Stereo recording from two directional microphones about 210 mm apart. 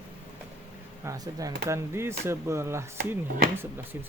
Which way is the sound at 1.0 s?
15° right (ahead or behind).